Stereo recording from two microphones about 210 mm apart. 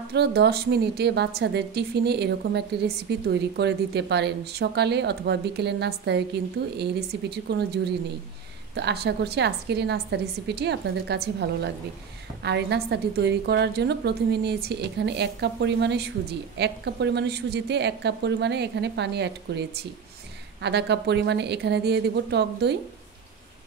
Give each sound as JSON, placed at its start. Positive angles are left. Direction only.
{"t": 0.1, "sound": "a woman's voice", "side_deg": -50}
{"t": 20.6, "sound": "a woman's voice", "side_deg": -55}